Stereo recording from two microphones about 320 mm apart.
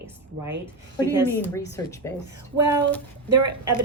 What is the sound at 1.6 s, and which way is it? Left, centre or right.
Speech, centre.